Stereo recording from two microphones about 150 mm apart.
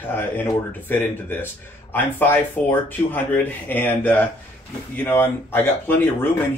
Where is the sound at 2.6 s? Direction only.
10° left (ahead or behind).